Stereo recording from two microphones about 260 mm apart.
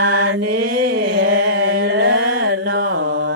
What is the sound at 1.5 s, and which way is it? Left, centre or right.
Mantra, right.